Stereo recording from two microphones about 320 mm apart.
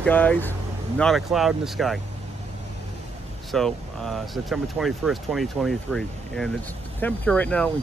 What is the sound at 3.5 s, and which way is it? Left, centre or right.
Speech, centre.